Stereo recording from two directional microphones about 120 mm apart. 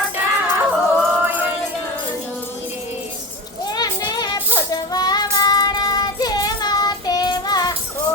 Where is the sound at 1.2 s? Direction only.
15° right (ahead or behind).